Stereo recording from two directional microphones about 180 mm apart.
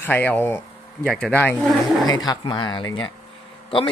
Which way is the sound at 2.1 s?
20° left (ahead or behind).